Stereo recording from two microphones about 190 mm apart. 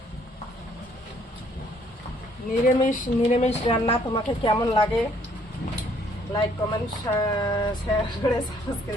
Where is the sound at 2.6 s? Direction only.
45° left (ahead or behind).